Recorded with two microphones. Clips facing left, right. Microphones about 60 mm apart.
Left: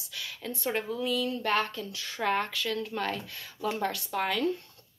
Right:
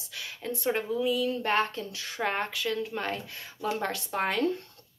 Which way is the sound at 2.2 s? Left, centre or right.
Right.